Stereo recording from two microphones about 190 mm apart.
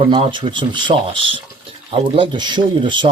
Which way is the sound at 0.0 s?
30° right (ahead or behind).